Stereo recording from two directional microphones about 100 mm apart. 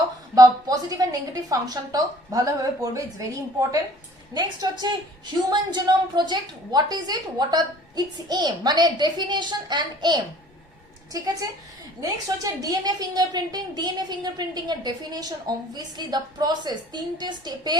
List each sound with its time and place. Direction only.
0.3 s a woman's voice: 35° right (ahead or behind)
4.4 s a woman's voice: 45° right (ahead or behind)